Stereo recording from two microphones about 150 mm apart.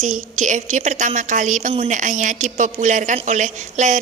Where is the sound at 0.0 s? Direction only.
60° right (ahead or behind).